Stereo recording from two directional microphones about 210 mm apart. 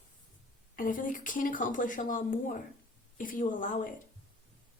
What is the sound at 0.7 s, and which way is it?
Speech, 40° left (ahead or behind).